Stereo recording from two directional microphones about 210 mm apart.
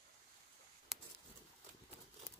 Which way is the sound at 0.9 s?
Centre (ahead or behind).